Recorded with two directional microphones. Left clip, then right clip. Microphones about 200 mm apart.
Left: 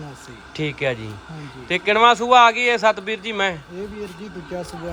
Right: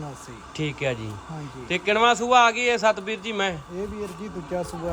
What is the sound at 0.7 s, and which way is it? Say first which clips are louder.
Speech: left 4 dB; 10° right (ahead or behind).